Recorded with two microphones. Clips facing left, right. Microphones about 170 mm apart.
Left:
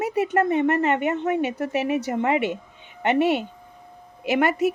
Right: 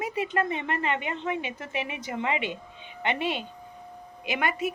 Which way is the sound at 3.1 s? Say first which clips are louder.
Left 9 dB; 70° left (ahead or behind).